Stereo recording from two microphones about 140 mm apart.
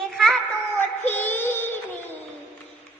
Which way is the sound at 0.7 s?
15° left (ahead or behind).